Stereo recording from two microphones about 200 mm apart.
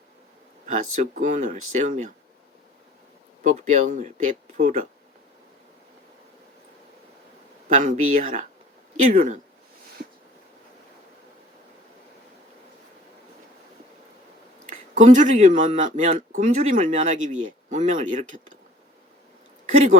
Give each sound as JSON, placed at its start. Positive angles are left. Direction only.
{"t": 0.7, "sound": "speech", "side_deg": -40}
{"t": 3.4, "sound": "speech", "side_deg": -35}
{"t": 7.7, "sound": "speech", "side_deg": -40}
{"t": 14.7, "sound": "speech", "side_deg": -35}
{"t": 19.7, "sound": "speech", "side_deg": -35}